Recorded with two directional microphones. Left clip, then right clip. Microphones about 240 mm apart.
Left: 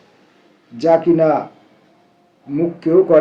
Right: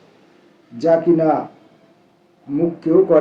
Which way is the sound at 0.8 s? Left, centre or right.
Left.